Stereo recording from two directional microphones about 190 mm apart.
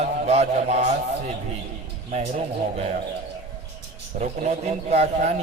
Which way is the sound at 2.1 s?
35° right (ahead or behind).